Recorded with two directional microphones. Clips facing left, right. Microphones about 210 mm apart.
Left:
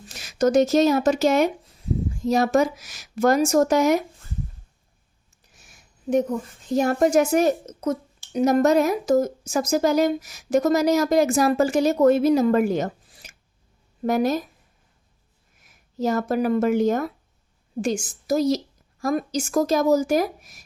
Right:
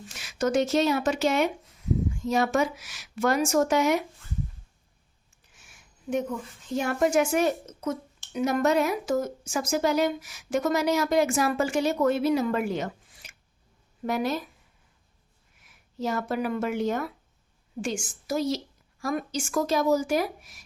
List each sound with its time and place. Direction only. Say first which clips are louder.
0.1 s speech: left 6 dB; 40° left (ahead or behind)
5.5 s a woman's voice: left 2 dB; 40° left (ahead or behind)
15.6 s speech: left 6 dB; 40° left (ahead or behind)